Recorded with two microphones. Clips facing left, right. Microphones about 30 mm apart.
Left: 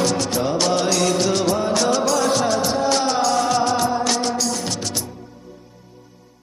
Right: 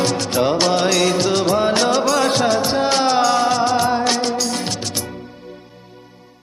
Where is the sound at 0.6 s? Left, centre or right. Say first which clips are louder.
Right 2 dB; right.